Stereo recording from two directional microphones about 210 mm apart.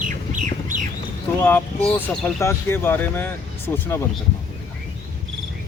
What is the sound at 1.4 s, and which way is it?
Speech, 10° left (ahead or behind).